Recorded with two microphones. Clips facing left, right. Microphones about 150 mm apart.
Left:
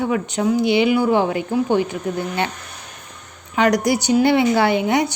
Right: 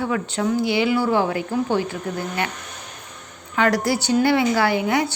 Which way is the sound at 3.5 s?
20° left (ahead or behind).